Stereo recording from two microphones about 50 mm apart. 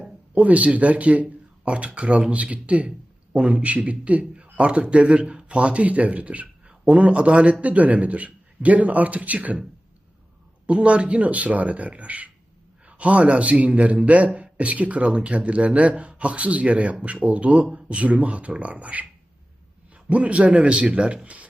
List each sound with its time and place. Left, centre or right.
0.3 s speech: right
10.7 s speech: right